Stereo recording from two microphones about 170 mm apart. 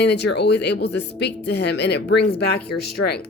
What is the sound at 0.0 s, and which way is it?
Speech, 80° left.